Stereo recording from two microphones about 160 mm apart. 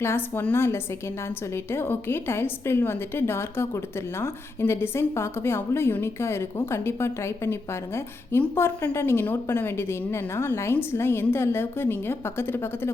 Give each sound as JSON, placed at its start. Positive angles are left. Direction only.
{"t": 0.0, "sound": "a woman's voice", "side_deg": 15}